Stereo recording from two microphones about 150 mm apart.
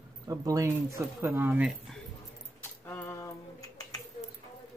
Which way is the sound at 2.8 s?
15° left (ahead or behind).